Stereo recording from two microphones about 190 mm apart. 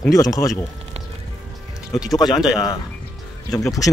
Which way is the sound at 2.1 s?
20° left (ahead or behind).